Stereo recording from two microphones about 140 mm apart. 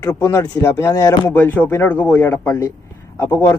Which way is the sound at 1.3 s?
15° left (ahead or behind).